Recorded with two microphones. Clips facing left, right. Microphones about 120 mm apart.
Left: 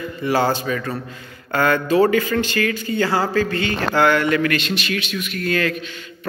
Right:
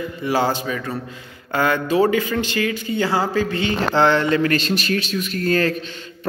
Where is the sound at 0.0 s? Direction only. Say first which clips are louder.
Left 1 dB; 15° right (ahead or behind).